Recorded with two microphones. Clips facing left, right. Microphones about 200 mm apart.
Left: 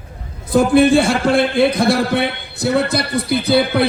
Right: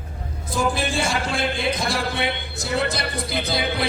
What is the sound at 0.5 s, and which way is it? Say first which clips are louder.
A man's voice: left 12 dB; 60° left (ahead or behind).